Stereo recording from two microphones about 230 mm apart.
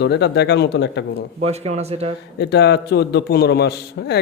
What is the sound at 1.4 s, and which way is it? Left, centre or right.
Speech, right.